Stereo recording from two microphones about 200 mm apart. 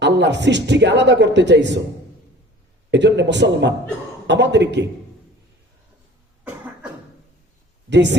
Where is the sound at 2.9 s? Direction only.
60° right (ahead or behind).